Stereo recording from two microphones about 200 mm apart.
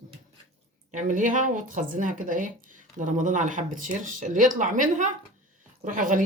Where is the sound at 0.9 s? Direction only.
40° right (ahead or behind).